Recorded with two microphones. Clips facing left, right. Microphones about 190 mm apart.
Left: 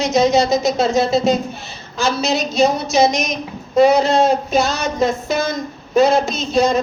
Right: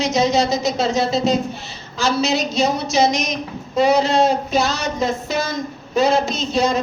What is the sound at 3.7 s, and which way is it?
Speech, 50° left (ahead or behind).